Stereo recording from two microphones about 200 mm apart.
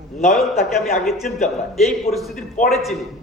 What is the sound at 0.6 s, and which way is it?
Speech, centre (ahead or behind).